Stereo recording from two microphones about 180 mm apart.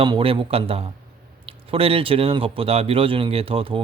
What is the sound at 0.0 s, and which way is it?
Speech, 30° right (ahead or behind).